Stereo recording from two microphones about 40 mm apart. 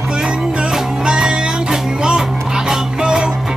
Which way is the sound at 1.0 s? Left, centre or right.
Centre.